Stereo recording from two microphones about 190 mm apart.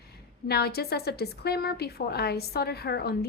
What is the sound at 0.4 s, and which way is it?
A woman's voice, 55° left (ahead or behind).